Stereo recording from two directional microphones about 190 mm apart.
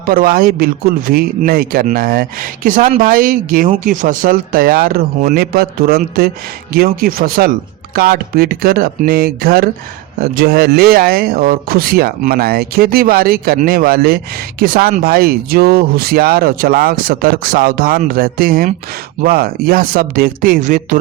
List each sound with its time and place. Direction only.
0.0 s speech: 50° right (ahead or behind)